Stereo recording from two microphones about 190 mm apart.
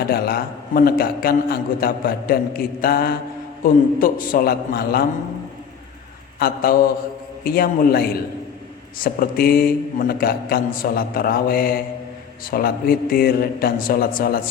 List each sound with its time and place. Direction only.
0.1 s a man's voice: 55° left (ahead or behind)
6.4 s a man's voice: 50° left (ahead or behind)